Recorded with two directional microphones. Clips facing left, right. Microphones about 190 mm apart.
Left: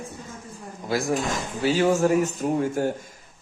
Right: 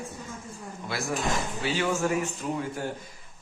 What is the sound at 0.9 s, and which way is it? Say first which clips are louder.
Speech: left 5 dB; 35° left (ahead or behind).